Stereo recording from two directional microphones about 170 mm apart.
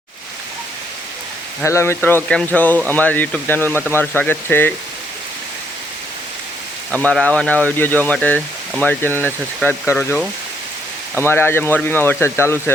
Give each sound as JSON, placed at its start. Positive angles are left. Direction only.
{"t": 1.6, "sound": "speech", "side_deg": 15}
{"t": 6.9, "sound": "speech", "side_deg": 5}